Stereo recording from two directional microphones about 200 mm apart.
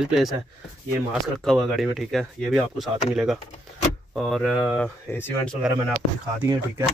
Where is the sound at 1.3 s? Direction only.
Centre (ahead or behind).